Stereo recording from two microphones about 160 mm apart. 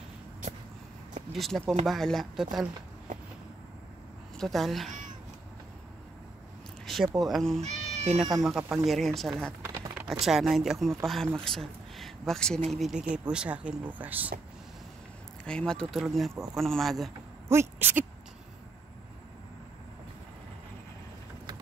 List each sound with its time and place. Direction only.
1.3 s speech: centre (ahead or behind)
4.4 s speech: centre (ahead or behind)
7.2 s speech: centre (ahead or behind)
7.6 s cat: 45° right (ahead or behind)
8.4 s speech: centre (ahead or behind)
9.6 s a sound: 15° right (ahead or behind)
10.2 s speech: centre (ahead or behind)
15.4 s speech: 5° left (ahead or behind)
17.5 s speech: 15° right (ahead or behind)